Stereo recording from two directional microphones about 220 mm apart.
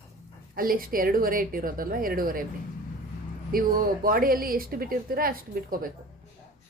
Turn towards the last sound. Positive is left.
turn(degrees=-40)  # may be behind; listen again after turning